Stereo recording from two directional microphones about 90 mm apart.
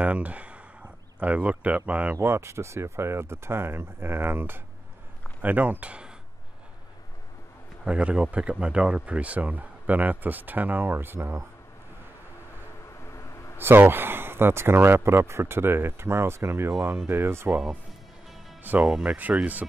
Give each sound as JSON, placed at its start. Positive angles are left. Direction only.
{"t": 0.0, "sound": "speech", "side_deg": -15}
{"t": 2.1, "sound": "speech", "side_deg": -30}
{"t": 7.8, "sound": "speech", "side_deg": -10}
{"t": 11.1, "sound": "speech", "side_deg": -35}
{"t": 13.1, "sound": "a sound", "side_deg": 30}
{"t": 13.6, "sound": "speech", "side_deg": -25}
{"t": 18.8, "sound": "speech", "side_deg": -5}
{"t": 19.1, "sound": "speech", "side_deg": -20}